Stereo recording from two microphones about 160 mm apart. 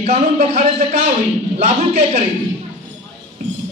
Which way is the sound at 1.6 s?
45° right (ahead or behind).